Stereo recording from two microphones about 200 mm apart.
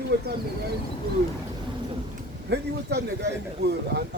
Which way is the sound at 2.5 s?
55° right (ahead or behind).